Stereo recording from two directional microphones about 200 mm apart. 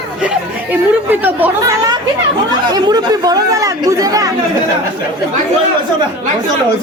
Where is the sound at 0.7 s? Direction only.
10° right (ahead or behind).